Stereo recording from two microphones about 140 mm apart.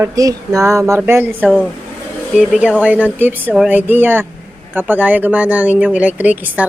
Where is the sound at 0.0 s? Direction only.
25° right (ahead or behind).